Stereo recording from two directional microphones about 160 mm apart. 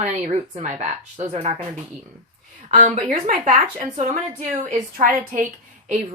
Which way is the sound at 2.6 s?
50° right (ahead or behind).